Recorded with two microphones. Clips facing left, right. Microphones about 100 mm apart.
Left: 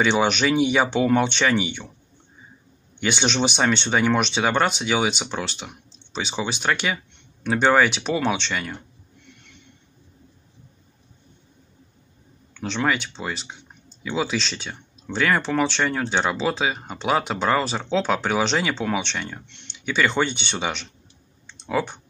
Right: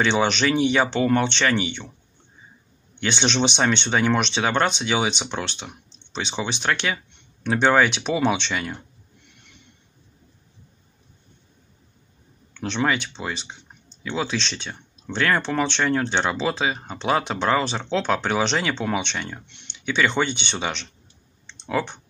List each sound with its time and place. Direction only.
0.0 s speech: 5° left (ahead or behind)
3.0 s speech: 5° left (ahead or behind)
12.5 s speech: centre (ahead or behind)
21.5 s clicking: 5° left (ahead or behind)